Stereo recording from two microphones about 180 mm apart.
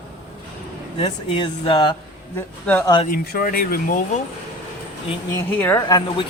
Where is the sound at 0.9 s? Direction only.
30° left (ahead or behind).